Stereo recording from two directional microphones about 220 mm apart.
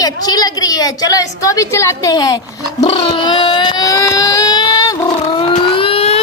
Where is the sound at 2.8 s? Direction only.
25° left (ahead or behind).